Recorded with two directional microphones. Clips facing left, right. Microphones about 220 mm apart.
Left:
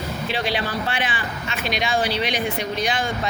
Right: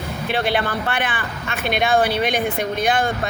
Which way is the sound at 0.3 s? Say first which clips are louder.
Right 5 dB; 55° right (ahead or behind).